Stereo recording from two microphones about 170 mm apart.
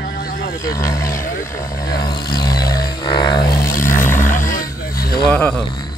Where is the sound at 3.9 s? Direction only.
50° left (ahead or behind).